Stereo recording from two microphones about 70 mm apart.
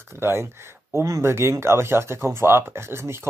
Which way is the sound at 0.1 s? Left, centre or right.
Right.